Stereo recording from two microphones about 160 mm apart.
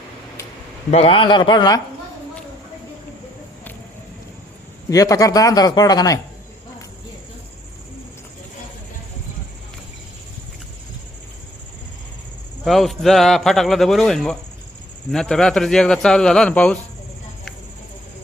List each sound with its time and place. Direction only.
0.9 s speech: 40° left (ahead or behind)
4.9 s a man's voice: 20° left (ahead or behind)
12.6 s a man's voice: centre (ahead or behind)